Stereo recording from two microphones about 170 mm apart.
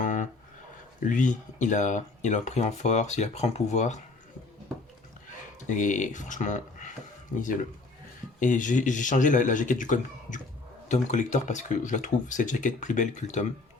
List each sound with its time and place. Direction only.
0.0 s a sound: 45° left (ahead or behind)
0.9 s speech: 50° left (ahead or behind)
5.6 s speech: 45° left (ahead or behind)
8.4 s speech: 50° left (ahead or behind)